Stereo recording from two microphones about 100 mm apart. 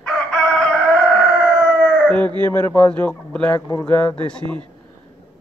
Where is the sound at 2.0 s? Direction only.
15° left (ahead or behind).